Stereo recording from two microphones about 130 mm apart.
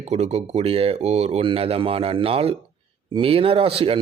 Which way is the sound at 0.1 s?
55° right (ahead or behind).